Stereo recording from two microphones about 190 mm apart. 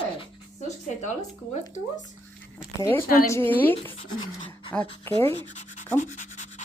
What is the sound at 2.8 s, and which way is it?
A woman's voice, 15° left (ahead or behind).